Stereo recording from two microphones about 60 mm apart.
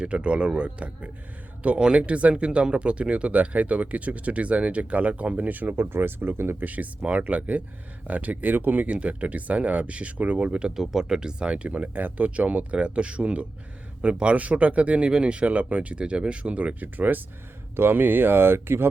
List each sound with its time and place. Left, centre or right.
0.0 s speech: centre; by 6.7 s right
6.7 s speech: right
10.8 s speech: centre; by 18.9 s right